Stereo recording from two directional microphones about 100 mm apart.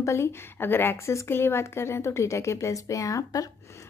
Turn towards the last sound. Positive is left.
turn(degrees=35)  # may be behind; listen again after turning